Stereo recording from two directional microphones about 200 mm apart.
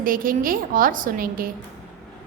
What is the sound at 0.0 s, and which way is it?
A woman's voice, 45° right (ahead or behind).